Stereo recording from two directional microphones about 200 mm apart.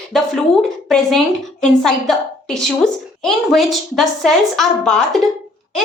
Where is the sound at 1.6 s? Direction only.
5° left (ahead or behind).